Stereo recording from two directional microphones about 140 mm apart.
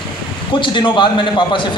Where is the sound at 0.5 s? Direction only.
35° left (ahead or behind).